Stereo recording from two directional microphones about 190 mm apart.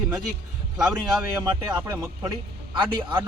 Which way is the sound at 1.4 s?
20° right (ahead or behind).